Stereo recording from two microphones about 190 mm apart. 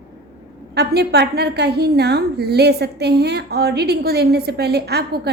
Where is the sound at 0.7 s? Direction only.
60° right (ahead or behind).